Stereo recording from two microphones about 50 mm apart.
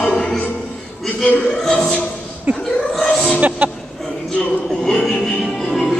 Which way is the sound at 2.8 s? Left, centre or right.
Centre.